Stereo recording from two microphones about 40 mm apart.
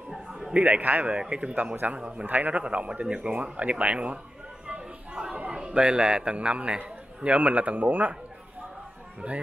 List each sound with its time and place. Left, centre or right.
0.1 s a sound: centre
0.5 s a man's voice: right
2.2 s a man's voice: right
2.5 s speech: right
4.6 s a sound: right
5.5 s a man's voice: right
9.2 s speech: right